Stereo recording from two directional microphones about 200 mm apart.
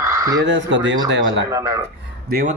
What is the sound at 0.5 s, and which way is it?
Speech, 65° right (ahead or behind).